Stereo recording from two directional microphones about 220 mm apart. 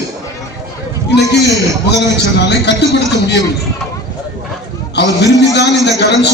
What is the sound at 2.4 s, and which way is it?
Speech, 50° left (ahead or behind).